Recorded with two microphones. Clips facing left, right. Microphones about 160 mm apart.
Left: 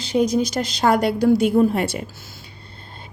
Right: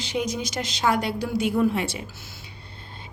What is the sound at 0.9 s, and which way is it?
Speech, 65° left (ahead or behind).